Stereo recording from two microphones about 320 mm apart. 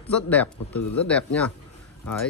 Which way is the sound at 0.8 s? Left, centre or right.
Left.